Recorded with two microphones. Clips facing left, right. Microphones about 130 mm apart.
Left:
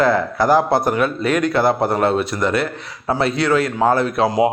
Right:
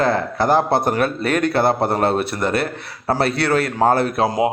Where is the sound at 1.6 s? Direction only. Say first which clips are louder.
Left 1 dB; 30° right (ahead or behind).